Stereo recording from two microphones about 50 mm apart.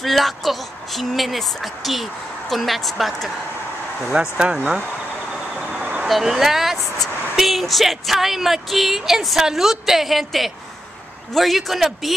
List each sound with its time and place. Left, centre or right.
0.0 s speech: centre
4.0 s speech: centre
5.7 s vehicle: right
6.0 s speech: centre